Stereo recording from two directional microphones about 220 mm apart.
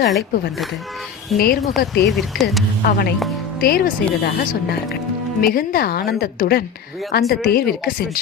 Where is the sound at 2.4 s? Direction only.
Centre (ahead or behind).